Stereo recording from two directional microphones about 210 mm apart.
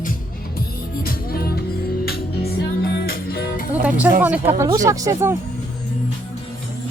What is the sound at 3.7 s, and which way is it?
Speech, 10° right (ahead or behind).